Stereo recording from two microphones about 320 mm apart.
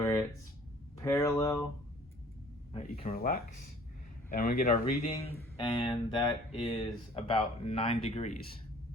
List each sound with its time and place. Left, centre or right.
0.0 s a sound: centre
0.9 s speech: centre
2.7 s speech: centre